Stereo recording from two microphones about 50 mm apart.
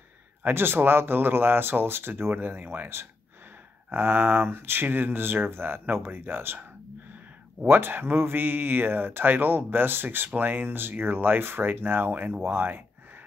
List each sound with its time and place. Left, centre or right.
0.4 s speech: right
2.3 s speech: right
3.9 s speech: right
7.6 s speech: right